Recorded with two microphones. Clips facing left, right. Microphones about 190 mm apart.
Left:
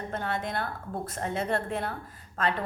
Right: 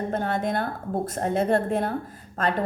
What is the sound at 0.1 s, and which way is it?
A woman's voice, 45° right (ahead or behind).